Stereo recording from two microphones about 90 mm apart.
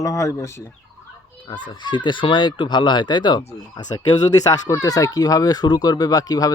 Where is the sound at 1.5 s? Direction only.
55° left (ahead or behind).